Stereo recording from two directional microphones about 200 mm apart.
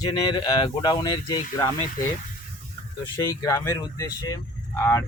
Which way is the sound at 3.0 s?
15° left (ahead or behind).